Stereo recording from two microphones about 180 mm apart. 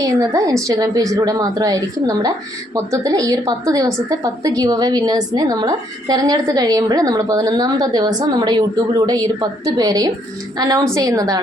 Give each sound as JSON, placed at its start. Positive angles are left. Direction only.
{"t": 0.0, "sound": "a woman's voice", "side_deg": -20}